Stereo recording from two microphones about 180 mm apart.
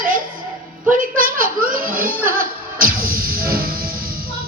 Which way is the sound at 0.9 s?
50° right (ahead or behind).